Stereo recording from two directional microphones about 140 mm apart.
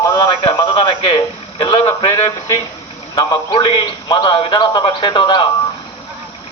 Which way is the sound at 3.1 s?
30° left (ahead or behind).